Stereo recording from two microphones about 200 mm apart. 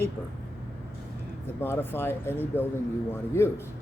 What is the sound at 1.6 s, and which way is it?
Speech, 10° left (ahead or behind).